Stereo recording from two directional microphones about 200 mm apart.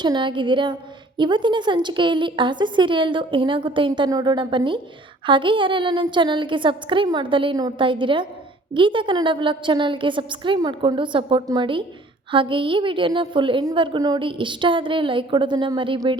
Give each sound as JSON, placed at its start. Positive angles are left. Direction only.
{"t": 0.0, "sound": "a woman's voice", "side_deg": -25}